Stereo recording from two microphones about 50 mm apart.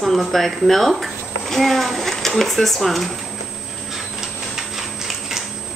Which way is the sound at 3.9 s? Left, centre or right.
Centre.